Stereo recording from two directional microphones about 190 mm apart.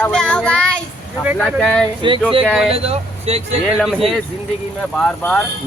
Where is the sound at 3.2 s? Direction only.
35° right (ahead or behind).